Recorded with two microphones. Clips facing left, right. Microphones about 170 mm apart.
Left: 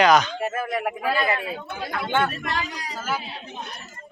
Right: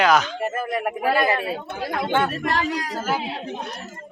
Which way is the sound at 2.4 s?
45° right (ahead or behind).